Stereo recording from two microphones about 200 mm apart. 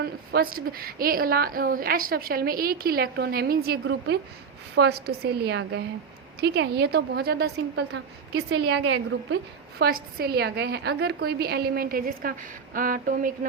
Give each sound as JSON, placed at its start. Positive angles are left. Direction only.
{"t": 0.0, "sound": "a woman's voice", "side_deg": -50}